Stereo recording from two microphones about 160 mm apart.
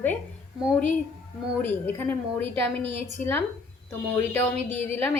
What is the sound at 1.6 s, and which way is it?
A woman's voice, 15° left (ahead or behind).